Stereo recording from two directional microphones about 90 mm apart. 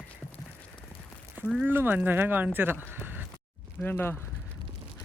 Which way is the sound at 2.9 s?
25° right (ahead or behind).